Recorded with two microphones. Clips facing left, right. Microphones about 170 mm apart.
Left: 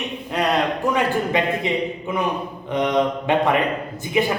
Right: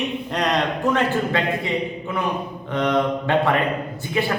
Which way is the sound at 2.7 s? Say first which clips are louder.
Left 1 dB; 20° left (ahead or behind).